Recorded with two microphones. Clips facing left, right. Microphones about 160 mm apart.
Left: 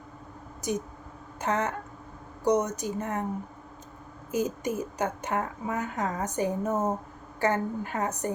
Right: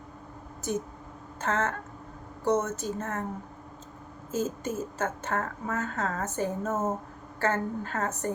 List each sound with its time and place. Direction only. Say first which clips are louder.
0.6 s speech: left 1 dB; 15° left (ahead or behind)
4.3 s speech: left 2 dB; 15° left (ahead or behind)